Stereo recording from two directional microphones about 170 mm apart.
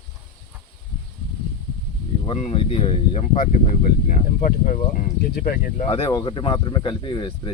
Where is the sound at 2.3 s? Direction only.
40° left (ahead or behind); by 5.9 s 60° left (ahead or behind).